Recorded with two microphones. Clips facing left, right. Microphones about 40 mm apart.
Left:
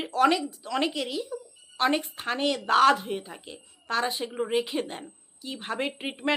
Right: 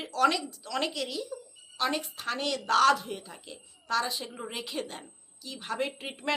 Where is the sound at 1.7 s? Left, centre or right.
Left.